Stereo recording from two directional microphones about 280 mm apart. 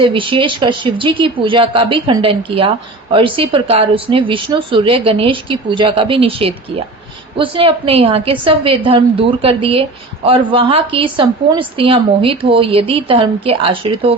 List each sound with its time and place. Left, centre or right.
0.0 s speech: centre